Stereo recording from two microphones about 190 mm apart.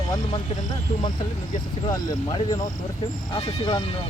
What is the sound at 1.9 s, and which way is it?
Speech, 20° left (ahead or behind).